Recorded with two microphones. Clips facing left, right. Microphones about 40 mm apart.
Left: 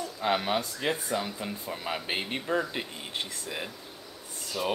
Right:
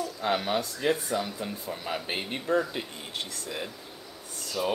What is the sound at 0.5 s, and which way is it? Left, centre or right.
A child's voice, left.